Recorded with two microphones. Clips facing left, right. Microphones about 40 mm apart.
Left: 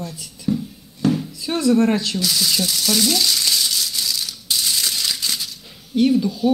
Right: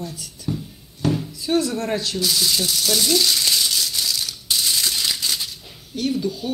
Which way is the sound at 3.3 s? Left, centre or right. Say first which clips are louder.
Even; centre.